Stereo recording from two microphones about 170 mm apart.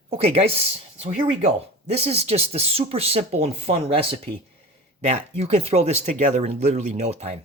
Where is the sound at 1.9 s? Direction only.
35° right (ahead or behind).